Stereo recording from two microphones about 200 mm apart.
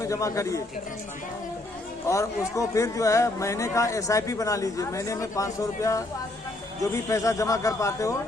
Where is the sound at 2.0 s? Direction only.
15° left (ahead or behind).